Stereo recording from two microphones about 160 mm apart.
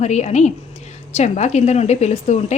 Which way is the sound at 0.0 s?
45° left (ahead or behind).